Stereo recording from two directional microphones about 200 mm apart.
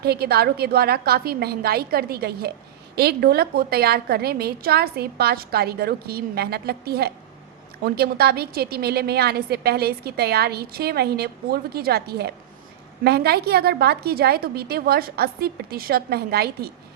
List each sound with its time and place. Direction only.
0.0 s a woman's voice: 50° right (ahead or behind)